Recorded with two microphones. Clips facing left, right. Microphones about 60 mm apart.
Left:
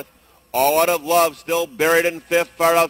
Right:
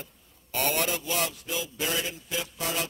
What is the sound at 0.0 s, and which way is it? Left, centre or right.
A man's voice, left.